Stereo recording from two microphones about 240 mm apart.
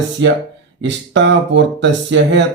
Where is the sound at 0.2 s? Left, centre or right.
Right.